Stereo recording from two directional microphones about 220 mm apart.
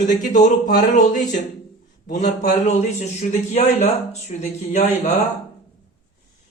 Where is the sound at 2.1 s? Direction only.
35° left (ahead or behind).